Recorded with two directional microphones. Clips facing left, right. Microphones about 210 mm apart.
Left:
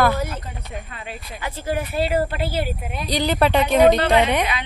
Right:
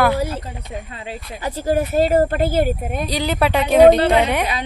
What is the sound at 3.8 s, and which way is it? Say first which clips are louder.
Speech: right 5 dB; 35° right (ahead or behind).